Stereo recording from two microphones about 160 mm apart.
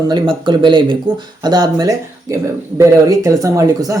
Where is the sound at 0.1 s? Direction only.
25° right (ahead or behind).